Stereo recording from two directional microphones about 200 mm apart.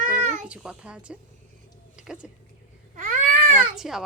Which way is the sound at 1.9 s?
5° right (ahead or behind).